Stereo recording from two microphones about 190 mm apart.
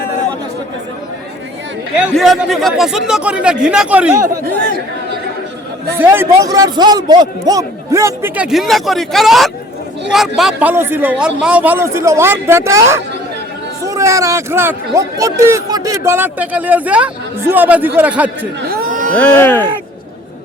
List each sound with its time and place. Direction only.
2.0 s speech: 5° right (ahead or behind)
6.1 s speech: 20° right (ahead or behind)
18.7 s a sound: 50° right (ahead or behind)
19.1 s speech: 10° left (ahead or behind)